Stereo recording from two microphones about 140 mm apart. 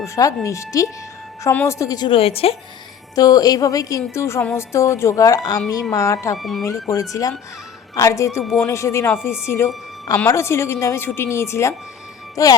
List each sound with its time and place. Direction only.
0.0 s a woman's voice: 20° left (ahead or behind)
2.0 s a woman's voice: 40° left (ahead or behind)
3.2 s a woman's voice: 25° left (ahead or behind)
6.3 s speech: centre (ahead or behind)
6.6 s a woman's voice: 20° left (ahead or behind)